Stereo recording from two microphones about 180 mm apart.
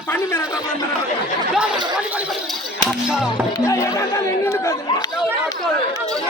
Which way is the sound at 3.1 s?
5° right (ahead or behind).